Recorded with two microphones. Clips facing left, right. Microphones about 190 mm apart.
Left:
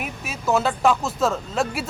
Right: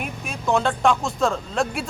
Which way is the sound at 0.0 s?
5° left (ahead or behind).